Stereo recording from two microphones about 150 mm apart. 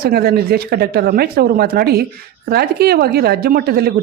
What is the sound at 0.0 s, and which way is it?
Speech, 90° right.